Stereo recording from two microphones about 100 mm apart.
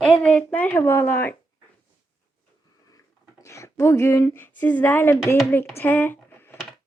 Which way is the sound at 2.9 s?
35° left (ahead or behind).